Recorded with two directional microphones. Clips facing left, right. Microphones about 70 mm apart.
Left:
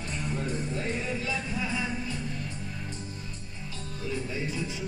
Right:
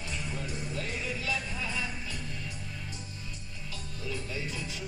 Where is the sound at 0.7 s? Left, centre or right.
Left.